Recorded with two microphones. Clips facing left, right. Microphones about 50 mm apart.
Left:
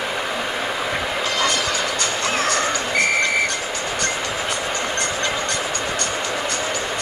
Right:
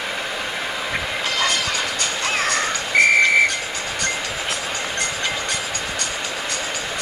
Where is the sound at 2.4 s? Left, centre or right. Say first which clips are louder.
Left 1 dB; right.